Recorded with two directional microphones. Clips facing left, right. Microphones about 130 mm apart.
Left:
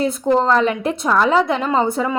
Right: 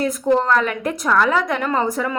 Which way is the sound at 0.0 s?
25° left (ahead or behind).